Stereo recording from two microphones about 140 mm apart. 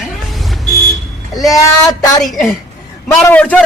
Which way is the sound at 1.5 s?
25° left (ahead or behind).